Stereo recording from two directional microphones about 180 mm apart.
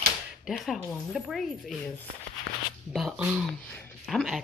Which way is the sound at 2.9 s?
5° right (ahead or behind).